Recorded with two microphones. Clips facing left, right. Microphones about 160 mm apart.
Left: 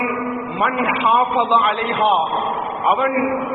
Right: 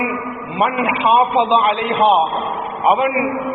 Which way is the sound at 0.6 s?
20° right (ahead or behind).